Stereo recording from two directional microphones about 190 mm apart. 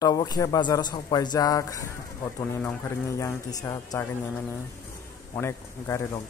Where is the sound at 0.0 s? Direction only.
20° left (ahead or behind).